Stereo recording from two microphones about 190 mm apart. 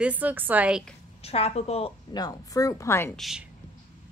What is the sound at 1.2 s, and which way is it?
Speech, 30° left (ahead or behind).